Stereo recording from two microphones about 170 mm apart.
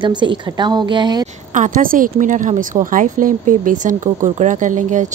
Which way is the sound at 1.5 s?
50° right (ahead or behind).